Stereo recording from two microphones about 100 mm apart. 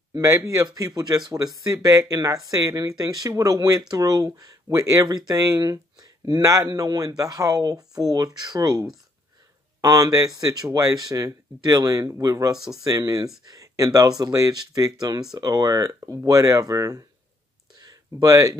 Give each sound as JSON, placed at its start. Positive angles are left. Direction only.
{"t": 0.1, "sound": "speech", "side_deg": -35}
{"t": 9.8, "sound": "speech", "side_deg": -35}